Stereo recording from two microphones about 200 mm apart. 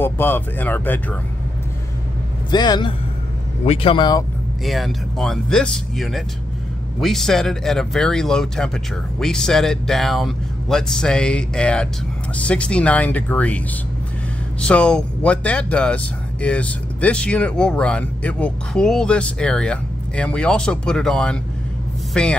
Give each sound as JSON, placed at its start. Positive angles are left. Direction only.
{"t": 0.0, "sound": "speech", "side_deg": 10}
{"t": 2.5, "sound": "speech", "side_deg": 20}
{"t": 4.6, "sound": "speech", "side_deg": 0}
{"t": 14.6, "sound": "speech", "side_deg": 5}